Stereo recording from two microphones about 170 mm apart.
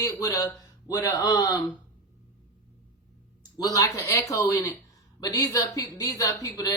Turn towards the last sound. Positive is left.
turn(degrees=20)  # may be behind; listen again after turning